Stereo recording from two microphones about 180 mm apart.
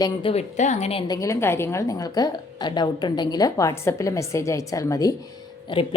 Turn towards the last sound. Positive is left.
turn(degrees=25)  # may be behind; listen again after turning